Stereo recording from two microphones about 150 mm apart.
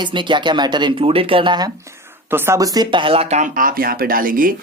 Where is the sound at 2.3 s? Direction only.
15° right (ahead or behind); by 3.5 s 45° right (ahead or behind).